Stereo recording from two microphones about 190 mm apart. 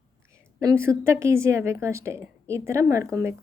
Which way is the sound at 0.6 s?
15° right (ahead or behind).